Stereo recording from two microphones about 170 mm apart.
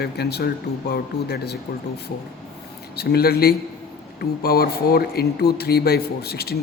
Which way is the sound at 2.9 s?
65° left (ahead or behind).